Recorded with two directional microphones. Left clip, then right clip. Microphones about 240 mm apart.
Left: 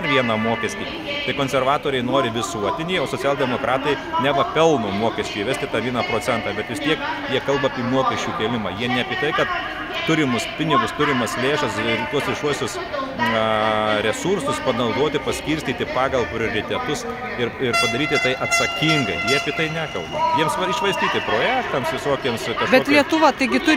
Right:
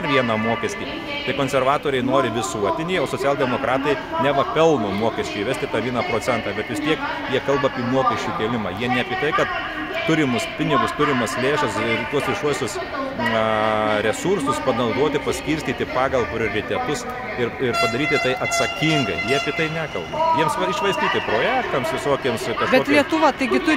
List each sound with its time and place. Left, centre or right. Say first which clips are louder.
0.1 s a man's voice: even; centre
1.4 s a man's voice: right 1 dB; centre
17.9 s a man's voice: even; centre
22.7 s speech: left 1 dB; centre